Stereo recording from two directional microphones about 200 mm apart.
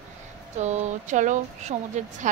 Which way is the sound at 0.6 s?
35° right (ahead or behind).